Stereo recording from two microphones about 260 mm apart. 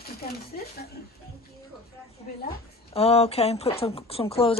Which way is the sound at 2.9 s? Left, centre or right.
Left.